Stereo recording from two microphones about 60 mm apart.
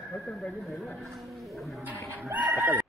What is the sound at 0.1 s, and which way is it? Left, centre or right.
Speech, centre.